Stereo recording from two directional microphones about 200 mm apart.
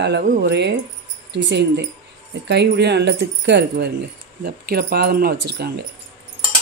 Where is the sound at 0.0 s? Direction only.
55° right (ahead or behind).